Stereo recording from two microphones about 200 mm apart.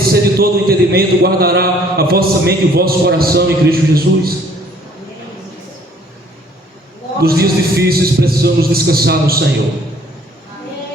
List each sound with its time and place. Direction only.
0.1 s a man's voice: 50° right (ahead or behind)
7.2 s a man's voice: 50° right (ahead or behind)